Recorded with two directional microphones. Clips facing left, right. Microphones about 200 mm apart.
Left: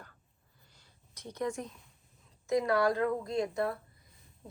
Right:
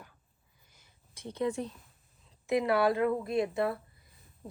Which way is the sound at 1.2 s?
25° right (ahead or behind).